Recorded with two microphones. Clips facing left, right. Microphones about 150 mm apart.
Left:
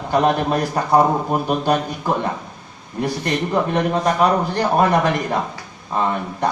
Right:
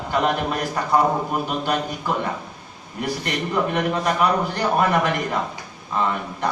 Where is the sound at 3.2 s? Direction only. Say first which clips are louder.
Left 3 dB; 30° left (ahead or behind).